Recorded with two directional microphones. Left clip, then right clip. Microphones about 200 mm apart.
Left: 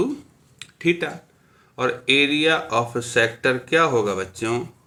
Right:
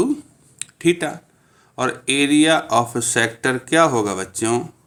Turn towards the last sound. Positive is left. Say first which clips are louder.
# right 3 dB
turn(degrees=-50)  # may be behind; listen again after turning